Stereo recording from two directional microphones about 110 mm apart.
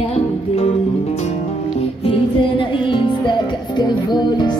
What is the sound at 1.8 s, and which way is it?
Music, 55° left (ahead or behind).